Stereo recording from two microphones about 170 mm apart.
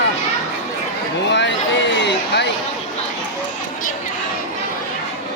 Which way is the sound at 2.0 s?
85° left.